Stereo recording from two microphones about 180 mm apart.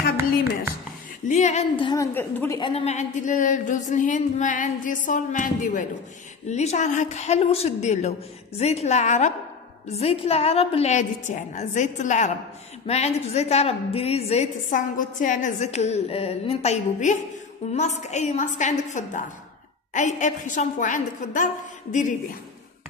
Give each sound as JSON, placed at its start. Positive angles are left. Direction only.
{"t": 1.3, "sound": "a woman's voice", "side_deg": 40}
{"t": 2.1, "sound": "a woman's voice", "side_deg": 15}
{"t": 2.6, "sound": "a woman's voice", "side_deg": 35}